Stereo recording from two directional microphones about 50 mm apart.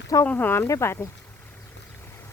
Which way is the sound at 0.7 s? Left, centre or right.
Left.